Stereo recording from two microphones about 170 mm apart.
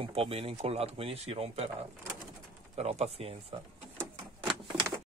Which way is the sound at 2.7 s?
40° right (ahead or behind).